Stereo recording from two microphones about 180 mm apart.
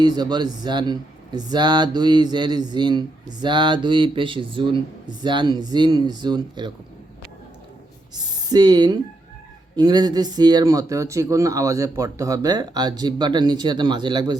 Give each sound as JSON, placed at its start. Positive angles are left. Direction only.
{"t": 0.0, "sound": "speech", "side_deg": -25}
{"t": 8.1, "sound": "speech", "side_deg": -25}